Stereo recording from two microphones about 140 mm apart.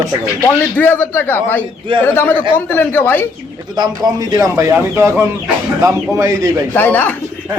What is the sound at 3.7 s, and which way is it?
A man's voice, 30° right (ahead or behind).